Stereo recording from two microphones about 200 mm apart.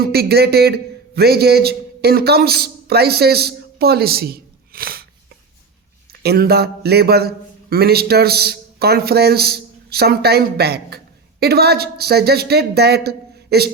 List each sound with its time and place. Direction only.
0.0 s speech: 50° right (ahead or behind)
6.2 s speech: 50° right (ahead or behind)